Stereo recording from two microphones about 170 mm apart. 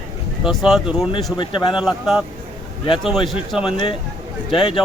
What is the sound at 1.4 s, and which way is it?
Speech, 30° left (ahead or behind).